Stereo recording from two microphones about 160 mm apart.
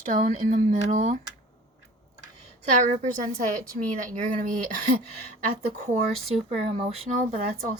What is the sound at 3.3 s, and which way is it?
A woman's voice, 60° right (ahead or behind).